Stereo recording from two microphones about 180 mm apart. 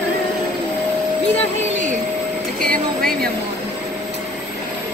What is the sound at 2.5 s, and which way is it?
Music, 55° right (ahead or behind).